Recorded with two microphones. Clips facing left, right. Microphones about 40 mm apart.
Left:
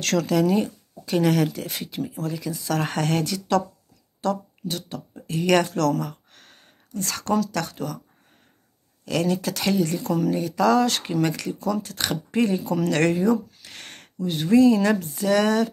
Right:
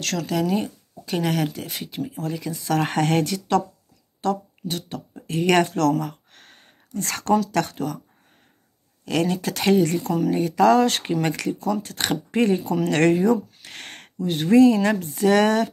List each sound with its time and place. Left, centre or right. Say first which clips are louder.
0.0 s speech: left 4 dB; centre
0.3 s speech: left 1 dB; centre
2.1 s speech: even; right
9.0 s speech: right 1 dB; right
14.8 s speech: right 1 dB; right